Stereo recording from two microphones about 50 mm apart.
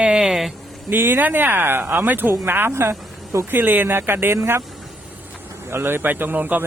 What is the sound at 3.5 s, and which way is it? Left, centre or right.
Speech, right.